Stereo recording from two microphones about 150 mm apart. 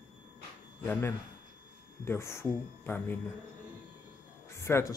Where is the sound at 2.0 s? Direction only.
20° left (ahead or behind).